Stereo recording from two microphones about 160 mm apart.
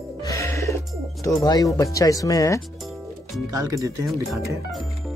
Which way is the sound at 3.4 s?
20° right (ahead or behind).